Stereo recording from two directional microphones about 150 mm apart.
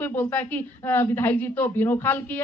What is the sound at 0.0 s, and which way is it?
A woman's voice, 15° left (ahead or behind).